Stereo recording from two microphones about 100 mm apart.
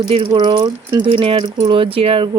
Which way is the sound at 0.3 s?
50° right (ahead or behind).